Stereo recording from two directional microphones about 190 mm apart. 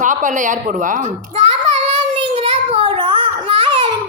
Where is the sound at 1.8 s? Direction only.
25° right (ahead or behind).